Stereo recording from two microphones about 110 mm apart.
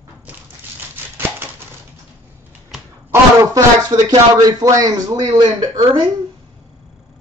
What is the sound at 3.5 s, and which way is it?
Speech, 40° right (ahead or behind).